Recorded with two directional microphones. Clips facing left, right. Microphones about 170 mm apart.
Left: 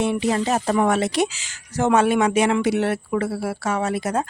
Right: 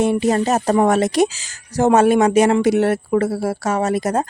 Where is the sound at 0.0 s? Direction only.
45° right (ahead or behind).